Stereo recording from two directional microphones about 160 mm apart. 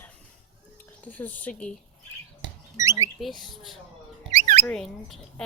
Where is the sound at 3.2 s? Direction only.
Centre (ahead or behind).